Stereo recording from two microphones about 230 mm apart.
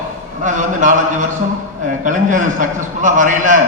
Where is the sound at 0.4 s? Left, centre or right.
Right.